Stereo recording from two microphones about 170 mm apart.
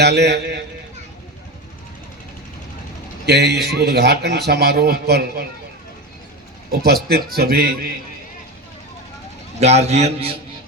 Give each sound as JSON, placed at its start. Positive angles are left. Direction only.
{"t": 0.0, "sound": "a man's voice", "side_deg": -75}
{"t": 3.2, "sound": "a man's voice", "side_deg": -75}
{"t": 6.7, "sound": "a man's voice", "side_deg": -65}
{"t": 9.6, "sound": "a man's voice", "side_deg": -40}